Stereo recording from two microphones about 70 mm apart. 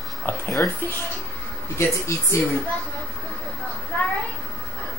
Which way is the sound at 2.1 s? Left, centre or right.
Left.